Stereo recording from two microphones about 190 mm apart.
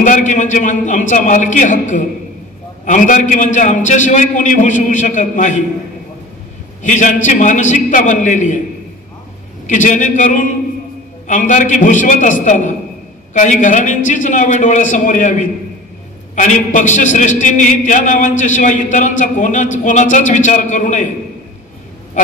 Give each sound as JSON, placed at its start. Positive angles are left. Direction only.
{"t": 0.0, "sound": "a man's voice", "side_deg": 40}
{"t": 6.8, "sound": "a man's voice", "side_deg": 40}
{"t": 9.7, "sound": "a man's voice", "side_deg": 40}